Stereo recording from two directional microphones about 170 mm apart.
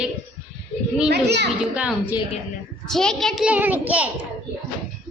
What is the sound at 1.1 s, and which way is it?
Speech, 85° right.